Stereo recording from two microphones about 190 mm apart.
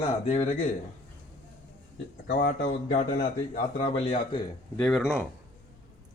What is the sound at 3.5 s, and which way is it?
Speech, 35° left (ahead or behind).